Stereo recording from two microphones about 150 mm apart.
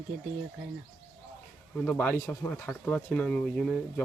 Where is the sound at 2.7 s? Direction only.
5° left (ahead or behind).